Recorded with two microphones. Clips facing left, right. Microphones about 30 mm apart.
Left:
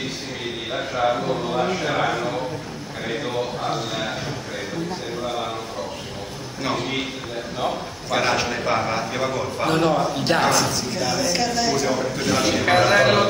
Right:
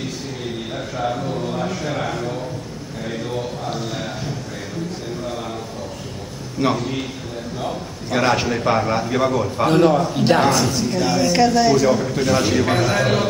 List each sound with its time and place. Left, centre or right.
0.7 s a man's voice: left
3.7 s a man's voice: centre
6.8 s a man's voice: left
8.2 s a man's voice: centre
12.7 s a man's voice: centre